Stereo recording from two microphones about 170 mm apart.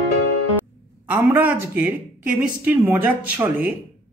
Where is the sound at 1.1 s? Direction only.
10° right (ahead or behind).